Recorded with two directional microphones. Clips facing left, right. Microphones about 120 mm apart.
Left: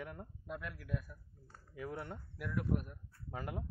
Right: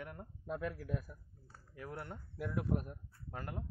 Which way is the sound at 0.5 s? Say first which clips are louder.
Right 4 dB; 35° right (ahead or behind).